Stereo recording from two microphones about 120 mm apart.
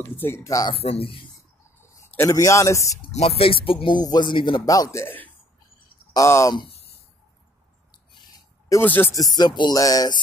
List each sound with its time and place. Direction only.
0.0 s speech: 20° left (ahead or behind)
0.7 s speech: 55° left (ahead or behind)
2.1 s a man's voice: 25° left (ahead or behind)
3.1 s speech: 55° left (ahead or behind)
4.6 s speech: 30° left (ahead or behind)
5.0 s a man's voice: 15° left (ahead or behind)
8.8 s speech: 15° left (ahead or behind)
9.1 s speech: 30° left (ahead or behind)